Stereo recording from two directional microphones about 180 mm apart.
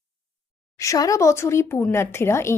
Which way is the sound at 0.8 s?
20° left (ahead or behind).